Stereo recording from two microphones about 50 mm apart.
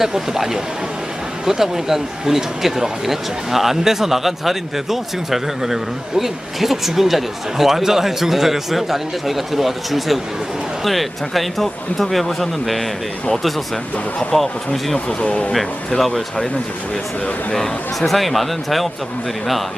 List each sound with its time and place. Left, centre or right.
0.0 s speech: centre
14.3 s speech: centre
14.9 s speech: centre
16.0 s speech: centre
17.5 s speech: centre